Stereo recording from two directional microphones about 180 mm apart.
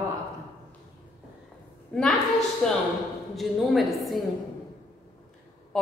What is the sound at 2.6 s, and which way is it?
A woman's voice, 5° left (ahead or behind).